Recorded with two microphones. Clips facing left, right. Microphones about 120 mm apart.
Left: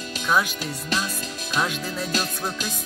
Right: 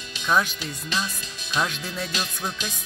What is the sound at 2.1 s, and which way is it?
Music, 45° left (ahead or behind).